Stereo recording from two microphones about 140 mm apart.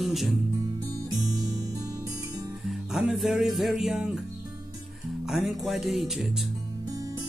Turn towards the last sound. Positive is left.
turn(degrees=0)  # may be behind; listen again after turning